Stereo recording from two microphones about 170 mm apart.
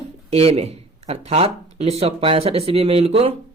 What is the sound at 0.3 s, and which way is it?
Speech, 35° right (ahead or behind).